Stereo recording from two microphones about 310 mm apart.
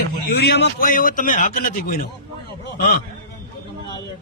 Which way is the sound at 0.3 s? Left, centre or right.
Left.